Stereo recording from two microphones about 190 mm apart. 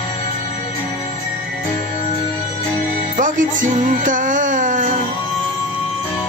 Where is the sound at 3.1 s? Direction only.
45° right (ahead or behind).